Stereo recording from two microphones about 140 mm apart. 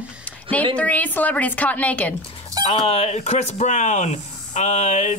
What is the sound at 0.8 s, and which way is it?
A woman's voice, 10° left (ahead or behind).